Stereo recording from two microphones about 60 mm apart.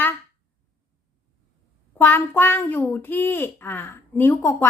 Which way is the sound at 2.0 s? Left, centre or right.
Left.